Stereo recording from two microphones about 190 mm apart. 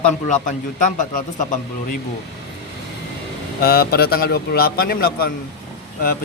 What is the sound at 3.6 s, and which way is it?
A man's voice, 55° left (ahead or behind).